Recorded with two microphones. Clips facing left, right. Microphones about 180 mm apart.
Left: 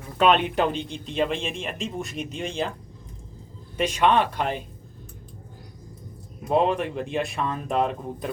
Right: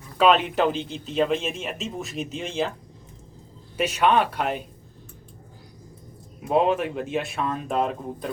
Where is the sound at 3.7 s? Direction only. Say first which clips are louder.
Even; 5° right (ahead or behind).